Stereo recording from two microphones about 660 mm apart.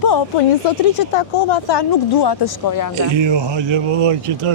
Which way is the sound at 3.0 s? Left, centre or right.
Right.